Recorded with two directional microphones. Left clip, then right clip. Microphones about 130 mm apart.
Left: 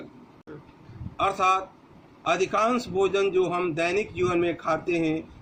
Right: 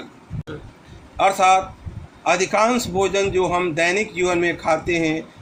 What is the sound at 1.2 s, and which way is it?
A man's voice, 15° right (ahead or behind).